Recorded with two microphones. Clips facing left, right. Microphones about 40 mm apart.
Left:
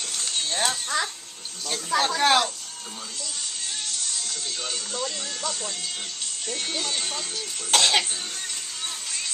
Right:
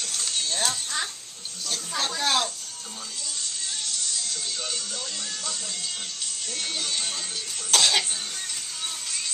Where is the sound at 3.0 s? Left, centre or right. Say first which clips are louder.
Even; centre.